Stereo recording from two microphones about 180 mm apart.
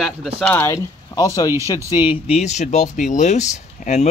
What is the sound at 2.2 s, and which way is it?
Speech, 40° left (ahead or behind).